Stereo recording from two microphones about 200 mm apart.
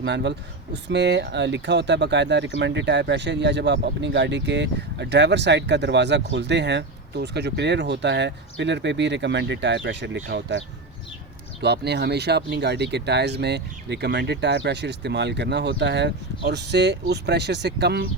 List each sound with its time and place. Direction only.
0.0 s speech: 60° right (ahead or behind)
11.6 s speech: 55° right (ahead or behind)